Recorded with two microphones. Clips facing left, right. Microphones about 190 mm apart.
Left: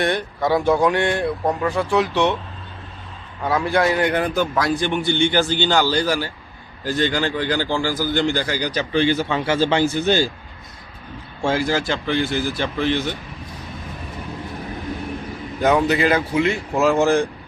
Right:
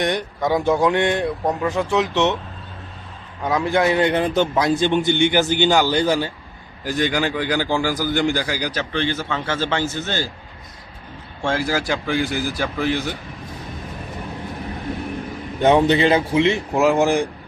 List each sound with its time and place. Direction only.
0.0 s a man's voice: 15° right (ahead or behind)
3.4 s a man's voice: 20° right (ahead or behind)
8.9 s speech: 10° left (ahead or behind)
11.6 s a man's voice: 10° right (ahead or behind)
15.6 s a man's voice: 25° right (ahead or behind)